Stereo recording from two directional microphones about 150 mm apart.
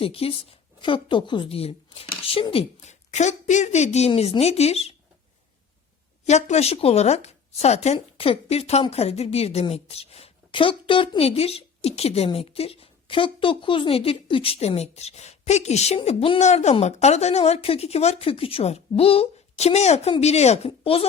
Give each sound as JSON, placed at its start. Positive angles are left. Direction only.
{"t": 0.0, "sound": "a woman's voice", "side_deg": 40}
{"t": 6.2, "sound": "a woman's voice", "side_deg": 50}
{"t": 16.0, "sound": "a woman's voice", "side_deg": 35}